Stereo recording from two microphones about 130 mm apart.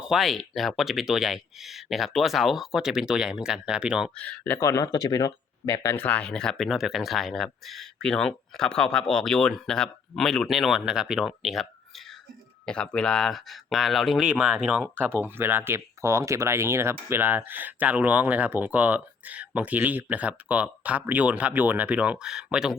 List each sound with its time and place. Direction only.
0.0 s speech: centre (ahead or behind)
4.1 s speech: 10° left (ahead or behind)
6.1 s speech: 10° left (ahead or behind)